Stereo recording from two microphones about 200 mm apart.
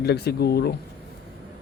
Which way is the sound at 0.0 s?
55° left (ahead or behind).